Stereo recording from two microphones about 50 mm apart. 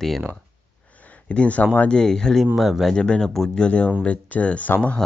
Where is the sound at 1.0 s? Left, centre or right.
Left.